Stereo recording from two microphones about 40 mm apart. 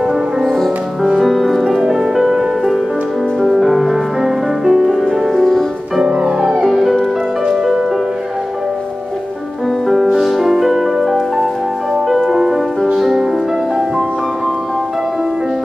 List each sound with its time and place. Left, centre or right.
0.0 s music: centre
1.2 s music: centre
5.9 s music: centre
6.7 s music: centre
10.2 s music: centre